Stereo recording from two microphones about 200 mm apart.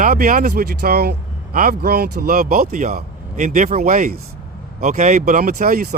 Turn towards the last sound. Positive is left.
turn(degrees=-45)  # may be behind; listen again after turning